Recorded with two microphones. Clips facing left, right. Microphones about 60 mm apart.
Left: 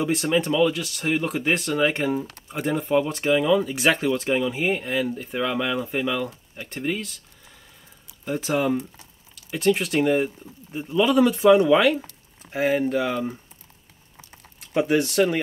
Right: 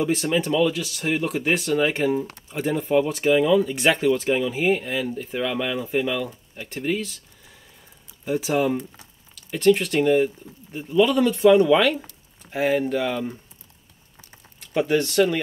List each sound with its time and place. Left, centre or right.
0.0 s speech: centre
8.3 s speech: centre
14.7 s speech: centre